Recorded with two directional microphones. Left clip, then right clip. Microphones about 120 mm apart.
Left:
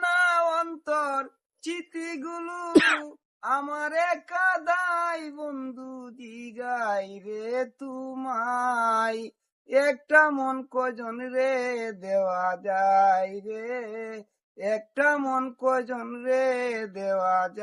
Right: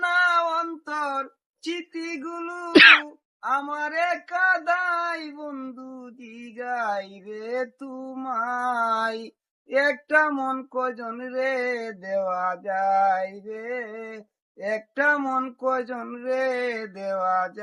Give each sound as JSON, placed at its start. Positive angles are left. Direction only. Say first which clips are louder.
{"t": 0.0, "sound": "female singing", "louder": "right 2 dB", "side_deg": 50}
{"t": 1.6, "sound": "speech", "louder": "right 2 dB", "side_deg": 50}
{"t": 2.2, "sound": "a sound", "louder": "right 2 dB", "side_deg": 25}
{"t": 2.7, "sound": "cat", "louder": "right 9 dB", "side_deg": 10}
{"t": 3.4, "sound": "speech", "louder": "right 2 dB", "side_deg": 45}
{"t": 10.4, "sound": "a sound", "louder": "right 1 dB", "side_deg": 30}
{"t": 10.8, "sound": "speech", "louder": "right 2 dB", "side_deg": 45}
{"t": 15.3, "sound": "speech", "louder": "right 1 dB", "side_deg": 45}
{"t": 15.6, "sound": "a sound", "louder": "left 1 dB", "side_deg": 30}
{"t": 16.2, "sound": "speech", "louder": "even", "side_deg": 55}